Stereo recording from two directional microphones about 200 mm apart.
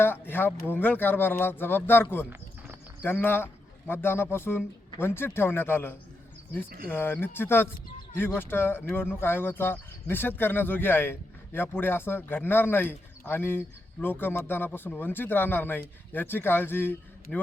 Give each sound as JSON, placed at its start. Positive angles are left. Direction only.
{"t": 0.0, "sound": "a man's voice", "side_deg": 10}
{"t": 6.7, "sound": "speech", "side_deg": -45}
{"t": 6.9, "sound": "speech", "side_deg": 10}